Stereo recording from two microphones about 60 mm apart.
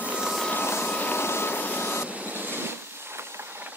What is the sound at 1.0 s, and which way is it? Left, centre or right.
Vehicle, left.